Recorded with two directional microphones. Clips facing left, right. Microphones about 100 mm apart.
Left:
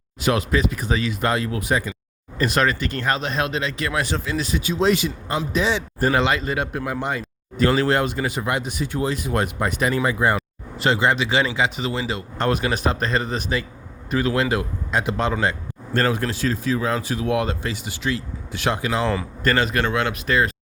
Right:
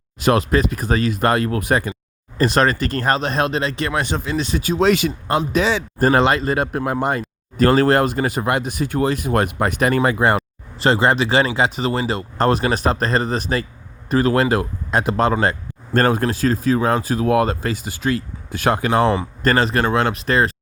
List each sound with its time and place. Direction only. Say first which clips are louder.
0.2 s speech: right 4 dB; 45° right (ahead or behind)
2.4 s speech: right 4 dB; 35° right (ahead or behind)
4.5 s speech: right 3 dB; 45° right (ahead or behind)
4.8 s speech: right 3 dB; 70° right (ahead or behind)
6.0 s speech: right 5 dB; 40° right (ahead or behind); by 10.4 s 60° right (ahead or behind)
10.8 s speech: right 3 dB; 35° right (ahead or behind)
19.4 s speech: right 2 dB; 35° right (ahead or behind)